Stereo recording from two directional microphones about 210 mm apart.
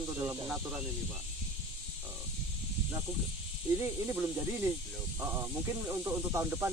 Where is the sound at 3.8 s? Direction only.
10° right (ahead or behind).